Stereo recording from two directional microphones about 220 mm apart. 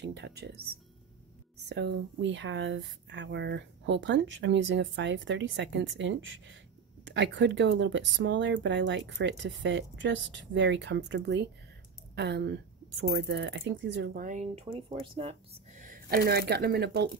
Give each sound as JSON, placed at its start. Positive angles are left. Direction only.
{"t": 0.0, "sound": "speech", "side_deg": -50}
{"t": 1.7, "sound": "speech", "side_deg": -50}